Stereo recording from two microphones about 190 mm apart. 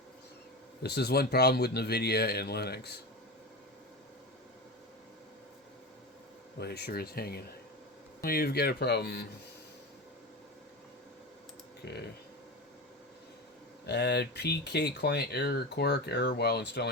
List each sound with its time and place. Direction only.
0.8 s speech: 60° left (ahead or behind)
6.6 s speech: 55° left (ahead or behind)
11.8 s speech: 60° left (ahead or behind)
13.8 s speech: 60° left (ahead or behind)